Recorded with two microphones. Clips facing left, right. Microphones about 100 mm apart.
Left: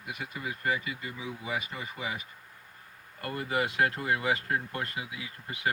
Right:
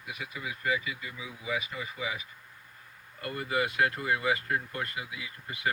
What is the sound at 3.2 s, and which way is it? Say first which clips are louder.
Speech: even; 35° left (ahead or behind).